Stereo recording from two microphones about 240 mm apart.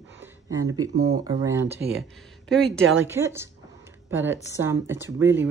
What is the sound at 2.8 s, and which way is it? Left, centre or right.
Speech, right.